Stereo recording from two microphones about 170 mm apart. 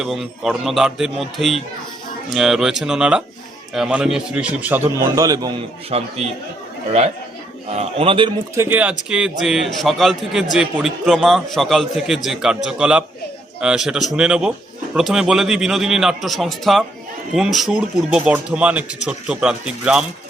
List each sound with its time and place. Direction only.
0.0 s a man's voice: centre (ahead or behind); by 5.5 s 20° right (ahead or behind)
5.9 s a man's voice: 40° right (ahead or behind)
7.7 s a man's voice: 35° right (ahead or behind)
8.5 s a man's voice: 10° right (ahead or behind)